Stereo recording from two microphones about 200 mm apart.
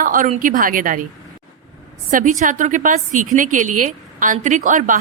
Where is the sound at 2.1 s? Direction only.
40° right (ahead or behind).